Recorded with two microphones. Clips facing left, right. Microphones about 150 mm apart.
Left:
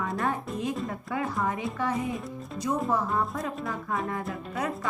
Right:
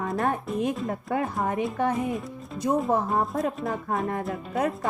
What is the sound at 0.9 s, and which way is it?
Speech, 45° right (ahead or behind).